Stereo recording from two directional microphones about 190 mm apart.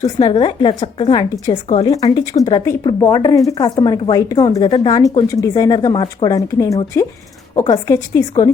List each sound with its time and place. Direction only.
0.0 s a woman's voice: 25° left (ahead or behind)